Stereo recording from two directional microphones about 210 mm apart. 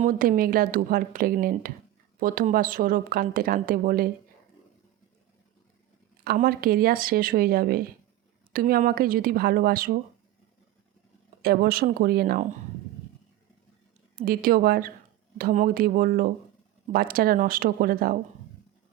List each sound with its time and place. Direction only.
0.0 s speech: 40° right (ahead or behind)
6.2 s speech: 45° right (ahead or behind)
11.4 s speech: 45° right (ahead or behind)
14.2 s speech: 45° right (ahead or behind)